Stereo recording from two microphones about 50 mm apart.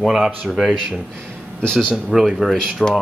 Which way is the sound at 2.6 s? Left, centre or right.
Centre.